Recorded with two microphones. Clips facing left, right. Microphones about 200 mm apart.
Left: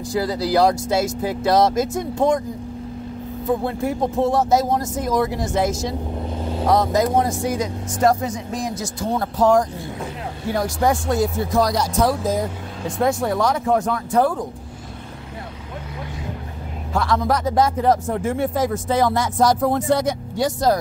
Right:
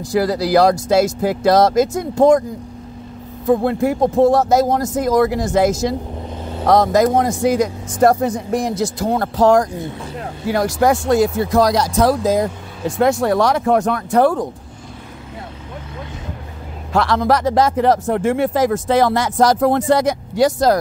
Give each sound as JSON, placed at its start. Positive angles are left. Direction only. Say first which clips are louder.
{"t": 0.1, "sound": "speech", "louder": "right 5 dB", "side_deg": -90}
{"t": 3.4, "sound": "speech", "louder": "right 6 dB", "side_deg": -75}
{"t": 4.3, "sound": "speech", "louder": "right 4 dB", "side_deg": -85}
{"t": 6.7, "sound": "speech", "louder": "right 5 dB", "side_deg": -90}
{"t": 16.9, "sound": "speech", "louder": "right 4 dB", "side_deg": -80}